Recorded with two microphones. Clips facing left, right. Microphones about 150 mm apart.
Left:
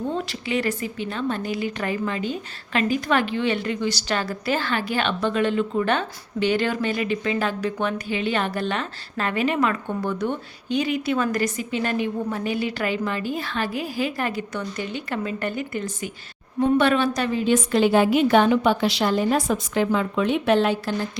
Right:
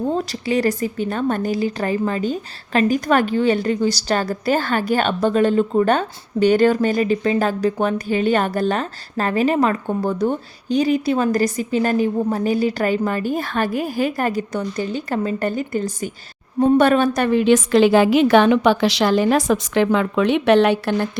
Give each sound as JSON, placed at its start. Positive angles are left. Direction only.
{"t": 0.1, "sound": "a woman's voice", "side_deg": -40}